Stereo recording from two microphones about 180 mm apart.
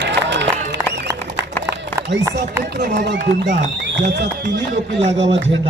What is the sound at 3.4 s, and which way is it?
Speech, 45° right (ahead or behind).